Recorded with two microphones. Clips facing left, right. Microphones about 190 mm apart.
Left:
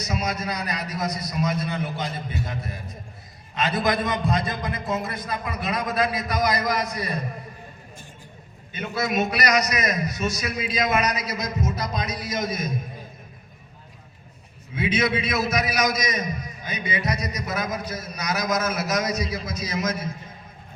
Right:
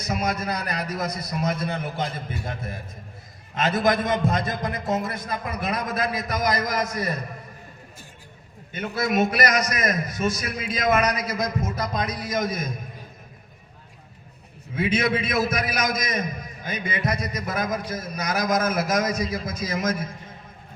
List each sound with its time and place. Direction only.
0.0 s a man's voice: 55° right (ahead or behind)
8.7 s a man's voice: 50° right (ahead or behind)
14.8 s a man's voice: 50° right (ahead or behind)